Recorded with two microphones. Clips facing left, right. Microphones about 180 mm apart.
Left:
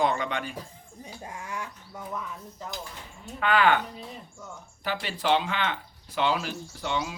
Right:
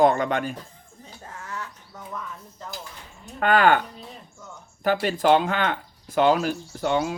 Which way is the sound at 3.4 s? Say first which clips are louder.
Right 4 dB; 45° right (ahead or behind).